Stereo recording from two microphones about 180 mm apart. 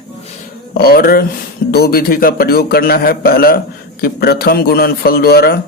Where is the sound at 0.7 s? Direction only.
55° left (ahead or behind).